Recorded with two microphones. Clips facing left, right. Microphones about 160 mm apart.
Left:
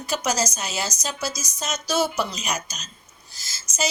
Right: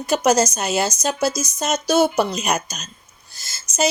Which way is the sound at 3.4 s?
55° right (ahead or behind).